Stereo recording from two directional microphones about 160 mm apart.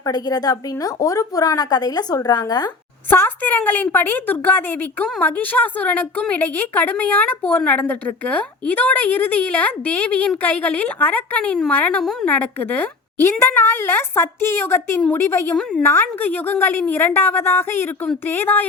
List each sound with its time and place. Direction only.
0.0 s a woman's voice: 25° left (ahead or behind)
3.1 s a woman's voice: 10° left (ahead or behind)